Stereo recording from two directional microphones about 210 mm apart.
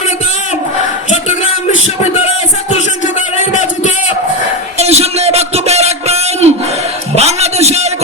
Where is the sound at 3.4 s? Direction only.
35° left (ahead or behind).